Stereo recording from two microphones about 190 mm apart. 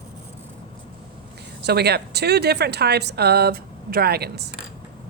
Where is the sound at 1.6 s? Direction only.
60° right (ahead or behind).